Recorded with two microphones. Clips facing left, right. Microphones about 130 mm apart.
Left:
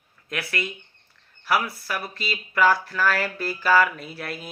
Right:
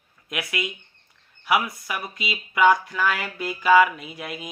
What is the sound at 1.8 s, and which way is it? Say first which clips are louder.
Speech: left 1 dB; 15° right (ahead or behind).